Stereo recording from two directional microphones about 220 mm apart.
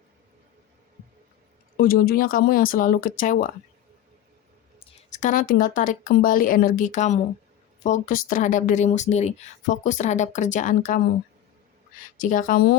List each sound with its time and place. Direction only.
1.7 s speech: 40° left (ahead or behind)
4.9 s speech: 35° left (ahead or behind)
12.2 s speech: 35° left (ahead or behind)